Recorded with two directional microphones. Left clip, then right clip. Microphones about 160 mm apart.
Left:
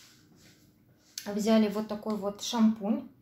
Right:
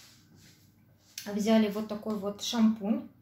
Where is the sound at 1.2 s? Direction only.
20° left (ahead or behind).